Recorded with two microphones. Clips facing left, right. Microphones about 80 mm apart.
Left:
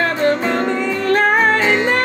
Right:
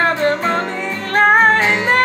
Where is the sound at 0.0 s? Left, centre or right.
Right.